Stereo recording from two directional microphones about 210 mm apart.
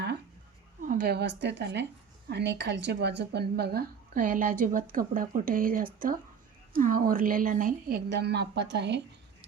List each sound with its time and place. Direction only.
0.8 s a woman's voice: 40° right (ahead or behind); by 9.0 s 55° right (ahead or behind)